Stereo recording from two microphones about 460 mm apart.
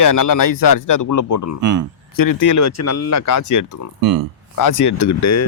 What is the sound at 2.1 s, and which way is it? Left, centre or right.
Speech, left.